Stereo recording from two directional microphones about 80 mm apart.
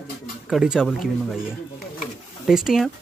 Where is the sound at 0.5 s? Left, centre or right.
Centre.